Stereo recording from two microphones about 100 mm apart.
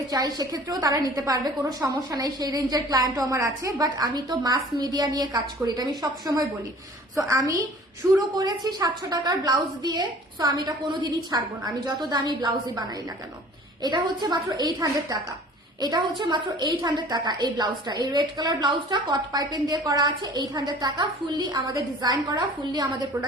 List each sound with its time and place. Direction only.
0.1 s a woman's voice: 40° right (ahead or behind)
13.8 s a woman's voice: 45° right (ahead or behind)